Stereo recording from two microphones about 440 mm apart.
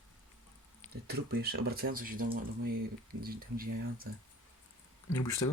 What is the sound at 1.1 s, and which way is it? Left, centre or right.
Speech, right.